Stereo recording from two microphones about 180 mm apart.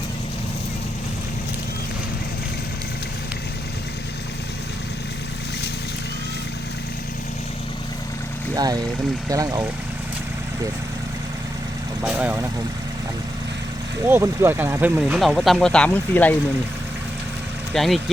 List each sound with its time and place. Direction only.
8.5 s speech: 20° right (ahead or behind)
12.0 s speech: 10° right (ahead or behind)
14.1 s speech: 15° right (ahead or behind); by 16.3 s 10° left (ahead or behind)
17.7 s speech: centre (ahead or behind)